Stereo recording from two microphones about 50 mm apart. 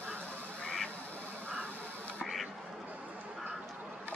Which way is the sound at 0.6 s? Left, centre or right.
Left.